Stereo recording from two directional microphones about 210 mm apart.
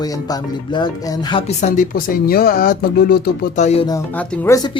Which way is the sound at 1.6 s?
40° left (ahead or behind).